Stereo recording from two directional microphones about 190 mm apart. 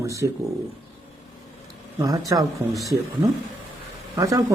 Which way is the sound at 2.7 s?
Centre (ahead or behind).